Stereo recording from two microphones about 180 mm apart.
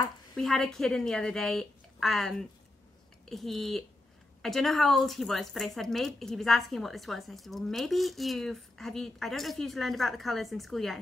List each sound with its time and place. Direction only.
0.4 s speech: centre (ahead or behind)